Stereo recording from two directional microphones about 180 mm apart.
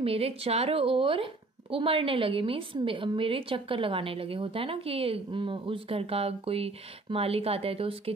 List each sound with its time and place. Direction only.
0.0 s speech: 35° right (ahead or behind)